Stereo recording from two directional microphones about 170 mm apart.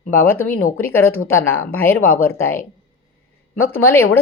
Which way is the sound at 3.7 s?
15° left (ahead or behind).